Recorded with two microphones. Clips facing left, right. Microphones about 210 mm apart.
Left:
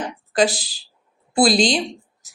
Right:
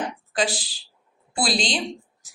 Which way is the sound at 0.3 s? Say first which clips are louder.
Left 7 dB; 40° left (ahead or behind).